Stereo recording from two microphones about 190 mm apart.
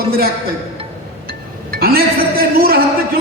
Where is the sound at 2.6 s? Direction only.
50° right (ahead or behind).